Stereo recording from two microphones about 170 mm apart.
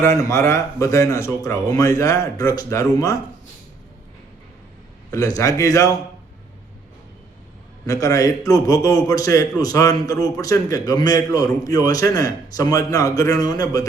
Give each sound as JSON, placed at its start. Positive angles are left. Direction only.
{"t": 0.0, "sound": "speech", "side_deg": 15}
{"t": 5.1, "sound": "a man's voice", "side_deg": 20}
{"t": 7.9, "sound": "a man's voice", "side_deg": 20}